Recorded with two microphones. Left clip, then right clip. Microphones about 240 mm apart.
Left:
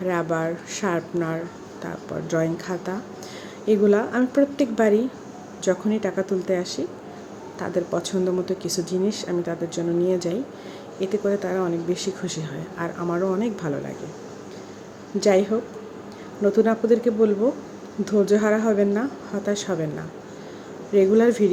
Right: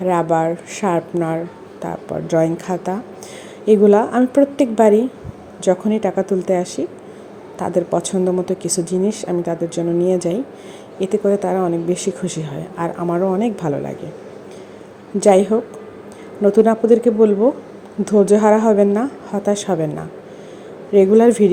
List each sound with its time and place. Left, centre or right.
0.0 s a woman's voice: centre
15.2 s a woman's voice: centre